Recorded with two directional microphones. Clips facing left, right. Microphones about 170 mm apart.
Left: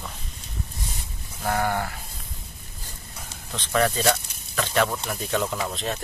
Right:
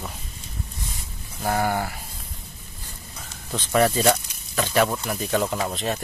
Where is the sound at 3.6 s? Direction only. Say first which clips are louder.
Right 3 dB; 10° right (ahead or behind).